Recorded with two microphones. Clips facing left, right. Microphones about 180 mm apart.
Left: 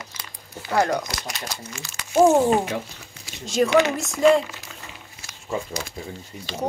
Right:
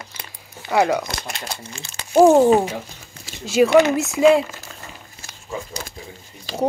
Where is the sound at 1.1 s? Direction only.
55° right (ahead or behind).